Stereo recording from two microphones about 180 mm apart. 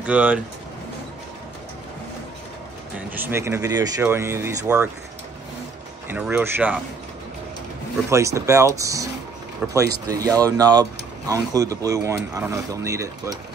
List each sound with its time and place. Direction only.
0.0 s speech: 5° right (ahead or behind)
3.1 s speech: 10° right (ahead or behind)
6.0 s speech: 10° right (ahead or behind)
8.1 s speech: 15° right (ahead or behind)